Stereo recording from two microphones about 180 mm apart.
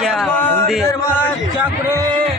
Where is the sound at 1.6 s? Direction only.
15° right (ahead or behind).